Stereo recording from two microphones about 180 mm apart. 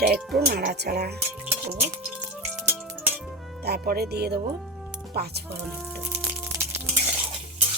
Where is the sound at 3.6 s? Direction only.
60° right (ahead or behind).